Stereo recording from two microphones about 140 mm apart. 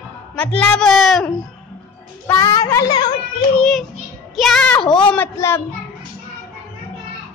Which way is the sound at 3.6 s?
Centre (ahead or behind).